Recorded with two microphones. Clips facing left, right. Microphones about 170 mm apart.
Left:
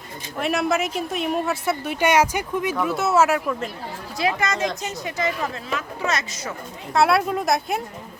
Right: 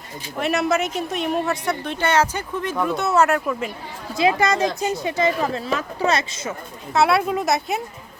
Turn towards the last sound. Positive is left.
turn(degrees=0)  # may be behind; listen again after turning